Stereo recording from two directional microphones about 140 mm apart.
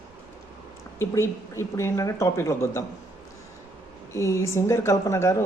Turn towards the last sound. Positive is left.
turn(degrees=20)  # may be behind; listen again after turning